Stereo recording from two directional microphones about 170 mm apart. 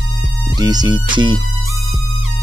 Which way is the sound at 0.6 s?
25° right (ahead or behind).